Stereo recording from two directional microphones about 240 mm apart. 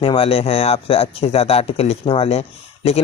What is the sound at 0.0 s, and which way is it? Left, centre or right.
Speech, left.